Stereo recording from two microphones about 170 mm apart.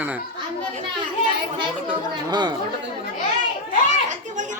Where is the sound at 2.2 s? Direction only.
25° right (ahead or behind).